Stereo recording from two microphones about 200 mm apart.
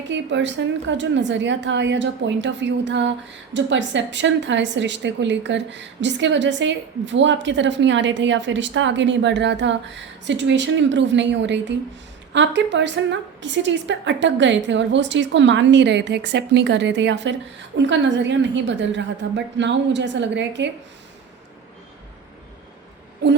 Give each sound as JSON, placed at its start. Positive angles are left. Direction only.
{"t": 0.1, "sound": "a woman's voice", "side_deg": -65}